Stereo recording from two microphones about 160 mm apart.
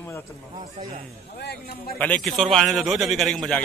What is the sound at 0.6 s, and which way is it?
Speech, 55° right (ahead or behind).